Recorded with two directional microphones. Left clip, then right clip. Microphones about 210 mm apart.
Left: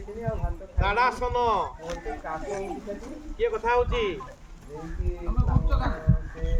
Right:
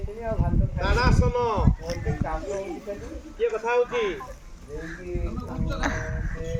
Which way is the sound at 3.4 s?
15° right (ahead or behind).